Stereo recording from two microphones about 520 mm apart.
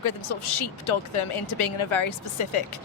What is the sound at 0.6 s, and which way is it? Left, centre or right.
Speech, left.